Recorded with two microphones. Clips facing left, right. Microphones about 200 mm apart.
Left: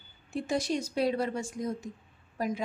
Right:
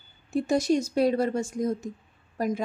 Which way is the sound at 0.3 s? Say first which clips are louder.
Right 7 dB; 45° right (ahead or behind).